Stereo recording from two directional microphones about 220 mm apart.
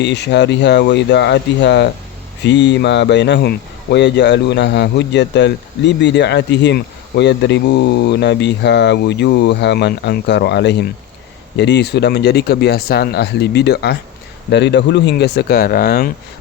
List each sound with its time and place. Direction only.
0.0 s speech: 50° left (ahead or behind)